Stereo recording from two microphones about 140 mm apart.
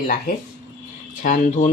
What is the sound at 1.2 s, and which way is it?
Speech, 70° left (ahead or behind).